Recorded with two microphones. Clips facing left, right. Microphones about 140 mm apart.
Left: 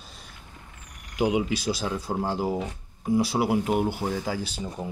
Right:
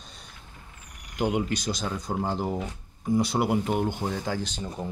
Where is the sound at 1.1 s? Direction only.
5° left (ahead or behind).